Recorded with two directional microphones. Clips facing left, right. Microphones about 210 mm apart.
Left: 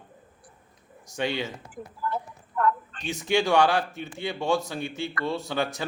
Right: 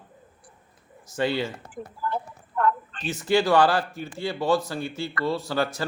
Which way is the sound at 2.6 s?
30° right (ahead or behind).